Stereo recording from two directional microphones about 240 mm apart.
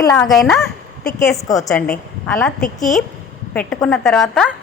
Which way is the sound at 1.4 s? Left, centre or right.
Centre.